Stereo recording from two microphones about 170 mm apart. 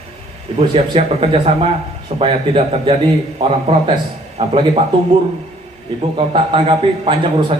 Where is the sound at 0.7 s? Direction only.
35° right (ahead or behind).